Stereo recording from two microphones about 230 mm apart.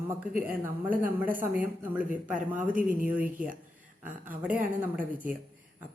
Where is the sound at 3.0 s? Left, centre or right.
Centre.